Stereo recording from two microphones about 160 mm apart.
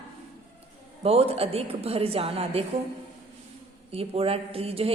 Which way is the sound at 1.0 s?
40° right (ahead or behind).